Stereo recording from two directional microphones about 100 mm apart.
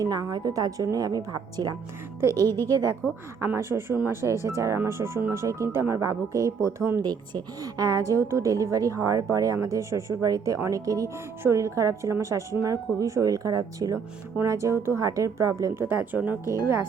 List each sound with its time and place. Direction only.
0.0 s speech: 35° right (ahead or behind)
3.4 s speech: 25° right (ahead or behind)
7.0 s speech: 45° right (ahead or behind); by 16.8 s 25° right (ahead or behind)